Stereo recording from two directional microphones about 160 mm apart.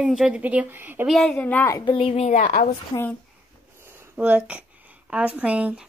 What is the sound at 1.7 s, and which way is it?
A woman's voice, 30° left (ahead or behind).